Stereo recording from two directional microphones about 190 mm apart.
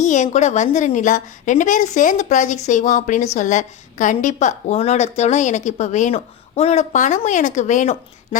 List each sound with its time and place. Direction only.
0.0 s a woman's voice: 40° left (ahead or behind)